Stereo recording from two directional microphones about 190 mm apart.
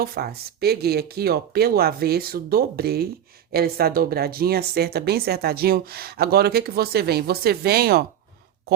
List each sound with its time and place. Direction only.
0.0 s speech: 55° right (ahead or behind)